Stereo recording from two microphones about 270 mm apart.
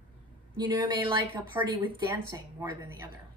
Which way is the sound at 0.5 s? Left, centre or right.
Centre.